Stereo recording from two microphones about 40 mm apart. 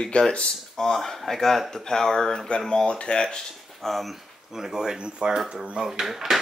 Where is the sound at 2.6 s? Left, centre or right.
Left.